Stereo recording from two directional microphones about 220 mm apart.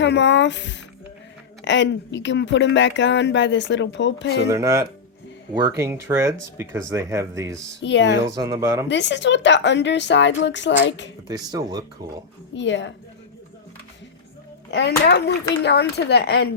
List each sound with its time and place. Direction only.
0.0 s a woman's voice: 55° left (ahead or behind)
4.4 s speech: 15° right (ahead or behind)
7.8 s speech: 55° left (ahead or behind)
8.4 s speech: 15° right (ahead or behind)
8.9 s a woman's voice: 55° left (ahead or behind)
11.3 s speech: 15° right (ahead or behind)
12.5 s speech: 55° left (ahead or behind)
14.7 s a woman's voice: 50° left (ahead or behind)